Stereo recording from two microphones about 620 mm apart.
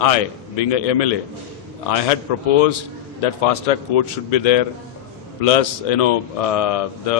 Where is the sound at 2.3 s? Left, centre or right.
Left.